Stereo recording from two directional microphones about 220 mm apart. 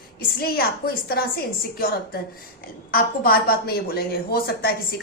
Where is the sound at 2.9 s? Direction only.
40° left (ahead or behind).